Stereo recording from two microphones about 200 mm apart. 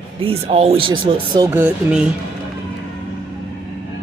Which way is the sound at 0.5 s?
30° right (ahead or behind).